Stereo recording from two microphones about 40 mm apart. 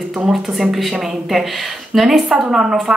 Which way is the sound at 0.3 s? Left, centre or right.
Centre.